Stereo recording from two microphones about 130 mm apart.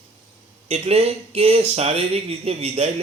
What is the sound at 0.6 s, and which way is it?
Speech, 50° right (ahead or behind).